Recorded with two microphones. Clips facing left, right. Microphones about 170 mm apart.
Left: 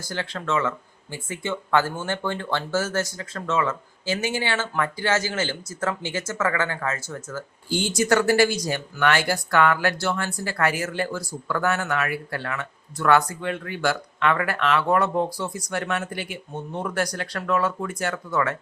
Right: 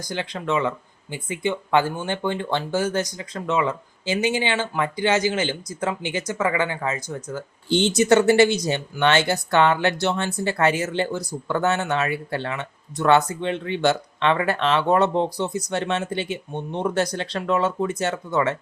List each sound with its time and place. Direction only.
0.0 s speech: 15° right (ahead or behind)